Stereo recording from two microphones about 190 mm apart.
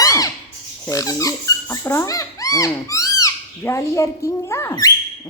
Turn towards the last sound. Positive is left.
turn(degrees=15)  # may be behind; listen again after turning